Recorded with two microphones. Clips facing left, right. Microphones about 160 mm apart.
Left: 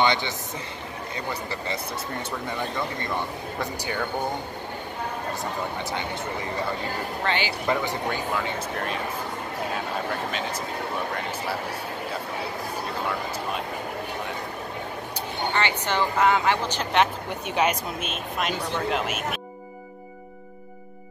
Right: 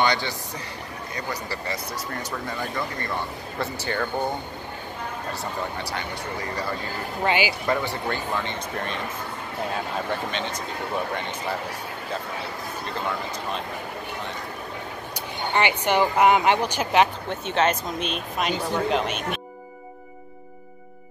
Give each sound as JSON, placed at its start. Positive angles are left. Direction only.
{"t": 0.0, "sound": "speech", "side_deg": 20}
{"t": 3.5, "sound": "speech", "side_deg": 10}
{"t": 7.2, "sound": "speech", "side_deg": -10}
{"t": 7.6, "sound": "speech", "side_deg": 15}
{"t": 15.5, "sound": "speech", "side_deg": -15}
{"t": 17.3, "sound": "speech", "side_deg": 10}